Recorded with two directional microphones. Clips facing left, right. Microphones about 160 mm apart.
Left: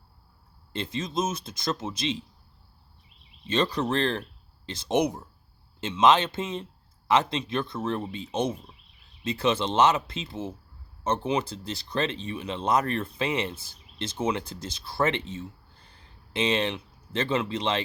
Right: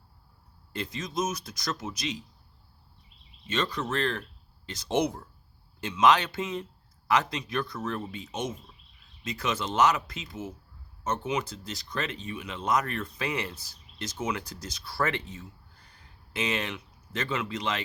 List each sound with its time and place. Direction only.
0.7 s speech: 25° left (ahead or behind)
3.4 s speech: 30° left (ahead or behind)